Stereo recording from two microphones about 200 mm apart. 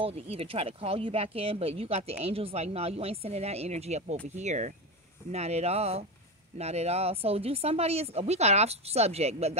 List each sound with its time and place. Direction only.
0.0 s speech: 30° right (ahead or behind)